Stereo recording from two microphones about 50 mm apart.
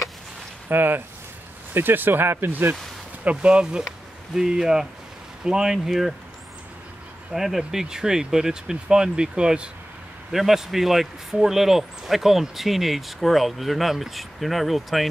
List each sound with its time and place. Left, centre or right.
0.7 s speech: right
3.3 s speech: right; by 6.1 s centre
7.3 s speech: centre
10.3 s speech: centre